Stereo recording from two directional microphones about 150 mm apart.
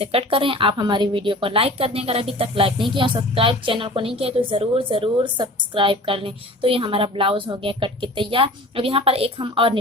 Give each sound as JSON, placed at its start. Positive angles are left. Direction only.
{"t": 0.0, "sound": "a woman's voice", "side_deg": -40}